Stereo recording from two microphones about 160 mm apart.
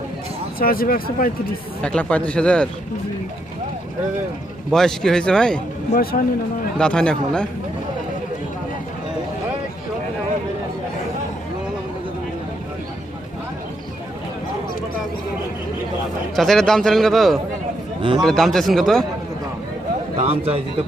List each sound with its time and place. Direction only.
0.6 s speech: 65° left (ahead or behind)
1.8 s speech: 5° left (ahead or behind)
4.7 s a man's voice: 5° left (ahead or behind)
6.0 s speech: 70° left (ahead or behind)
6.7 s a man's voice: 5° left (ahead or behind)
16.3 s a man's voice: centre (ahead or behind)
20.1 s a man's voice: 40° right (ahead or behind)